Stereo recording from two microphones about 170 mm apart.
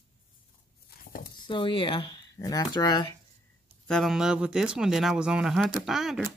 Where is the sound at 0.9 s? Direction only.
60° left (ahead or behind).